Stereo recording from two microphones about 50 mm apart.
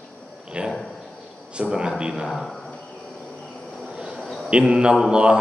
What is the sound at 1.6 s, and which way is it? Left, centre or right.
Mantra, centre.